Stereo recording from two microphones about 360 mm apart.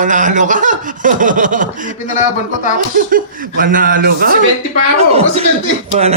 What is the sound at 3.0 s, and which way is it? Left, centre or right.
Speech, right.